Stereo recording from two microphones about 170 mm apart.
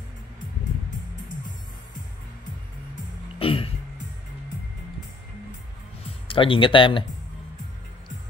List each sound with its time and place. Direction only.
3.3 s music: 35° left (ahead or behind)
6.0 s speech: 30° left (ahead or behind)